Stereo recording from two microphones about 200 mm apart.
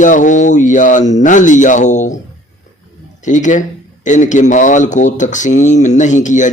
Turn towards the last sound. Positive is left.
turn(degrees=40)  # may be behind; listen again after turning